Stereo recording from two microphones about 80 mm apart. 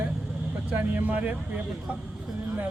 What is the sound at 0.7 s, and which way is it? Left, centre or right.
A man's voice, right.